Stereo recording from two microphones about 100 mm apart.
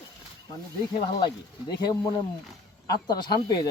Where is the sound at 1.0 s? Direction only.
45° left (ahead or behind).